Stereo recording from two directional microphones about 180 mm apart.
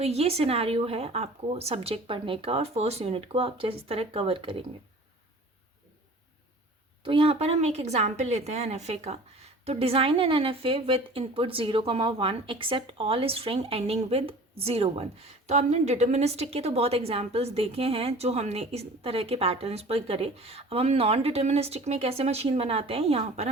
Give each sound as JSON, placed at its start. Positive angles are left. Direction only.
{"t": 0.0, "sound": "a woman's voice", "side_deg": -35}
{"t": 7.0, "sound": "a woman's voice", "side_deg": -30}